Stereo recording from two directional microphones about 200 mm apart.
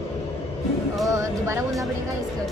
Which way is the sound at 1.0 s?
15° right (ahead or behind).